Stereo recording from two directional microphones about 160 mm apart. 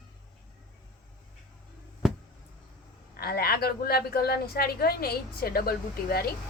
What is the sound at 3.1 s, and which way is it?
A woman's voice, 70° left (ahead or behind).